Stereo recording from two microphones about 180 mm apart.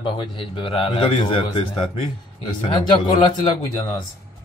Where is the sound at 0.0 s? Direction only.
25° left (ahead or behind).